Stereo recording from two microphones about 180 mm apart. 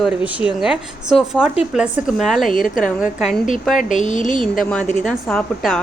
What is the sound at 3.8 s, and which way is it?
Speech, 45° left (ahead or behind).